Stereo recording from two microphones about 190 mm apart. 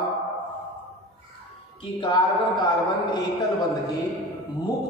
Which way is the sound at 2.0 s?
25° left (ahead or behind).